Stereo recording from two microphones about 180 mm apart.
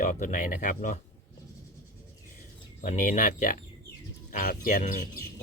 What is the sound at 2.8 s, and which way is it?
Speech, 45° left (ahead or behind).